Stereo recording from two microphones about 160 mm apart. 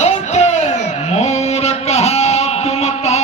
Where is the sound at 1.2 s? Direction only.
45° left (ahead or behind).